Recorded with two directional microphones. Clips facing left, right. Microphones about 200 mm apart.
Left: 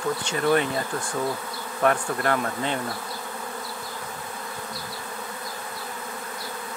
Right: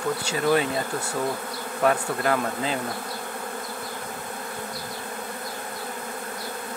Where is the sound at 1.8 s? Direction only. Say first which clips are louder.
Even; 20° right (ahead or behind).